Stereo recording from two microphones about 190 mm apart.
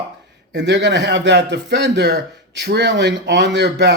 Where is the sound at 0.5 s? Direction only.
65° right (ahead or behind).